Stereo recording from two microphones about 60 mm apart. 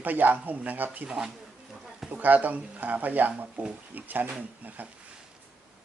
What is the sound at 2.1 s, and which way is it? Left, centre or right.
Speech, right.